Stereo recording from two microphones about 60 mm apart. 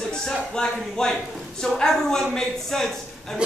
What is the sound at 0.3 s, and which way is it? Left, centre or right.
A woman's voice, centre.